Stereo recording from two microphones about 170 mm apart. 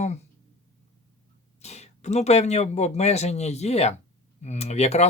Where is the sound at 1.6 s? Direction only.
40° left (ahead or behind).